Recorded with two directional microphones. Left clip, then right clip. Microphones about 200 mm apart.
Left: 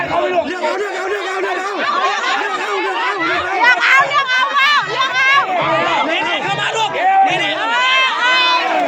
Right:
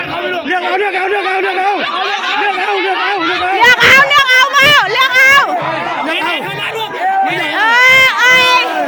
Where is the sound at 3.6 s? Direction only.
40° right (ahead or behind).